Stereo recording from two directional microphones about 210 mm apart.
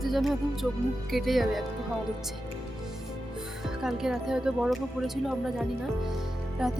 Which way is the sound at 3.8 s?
Centre (ahead or behind).